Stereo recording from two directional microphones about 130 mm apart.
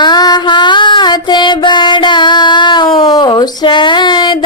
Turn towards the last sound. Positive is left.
turn(degrees=35)  # may be behind; listen again after turning